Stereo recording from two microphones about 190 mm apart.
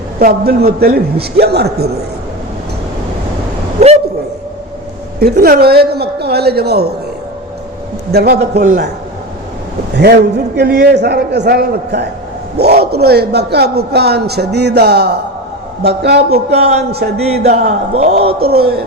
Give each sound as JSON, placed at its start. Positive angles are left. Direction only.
{"t": 0.2, "sound": "a man's voice", "side_deg": -55}
{"t": 5.2, "sound": "a man's voice", "side_deg": -50}
{"t": 8.1, "sound": "a man's voice", "side_deg": -60}
{"t": 10.0, "sound": "a man's voice", "side_deg": -60}
{"t": 17.4, "sound": "speech", "side_deg": -35}
{"t": 18.3, "sound": "a man's voice", "side_deg": -55}